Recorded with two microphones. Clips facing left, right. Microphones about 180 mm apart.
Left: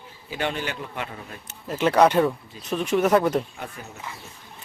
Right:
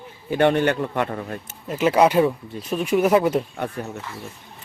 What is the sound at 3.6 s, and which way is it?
Speech, 65° right (ahead or behind).